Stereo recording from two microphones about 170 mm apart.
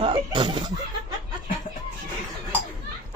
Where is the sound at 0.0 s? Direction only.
30° right (ahead or behind).